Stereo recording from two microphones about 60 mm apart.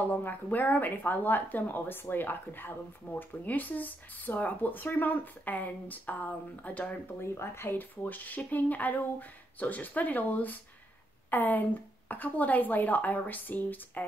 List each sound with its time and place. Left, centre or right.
0.2 s a woman's voice: left
7.2 s speech: left
8.0 s a woman's voice: left